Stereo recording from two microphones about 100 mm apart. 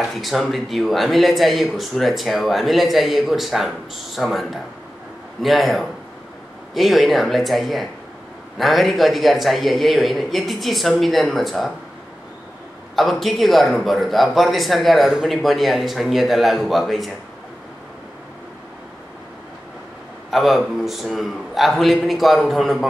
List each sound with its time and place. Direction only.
0.1 s speech: centre (ahead or behind)
12.9 s speech: centre (ahead or behind)
20.2 s speech: centre (ahead or behind)